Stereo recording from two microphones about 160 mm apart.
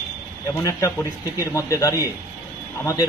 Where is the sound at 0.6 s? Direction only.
20° left (ahead or behind).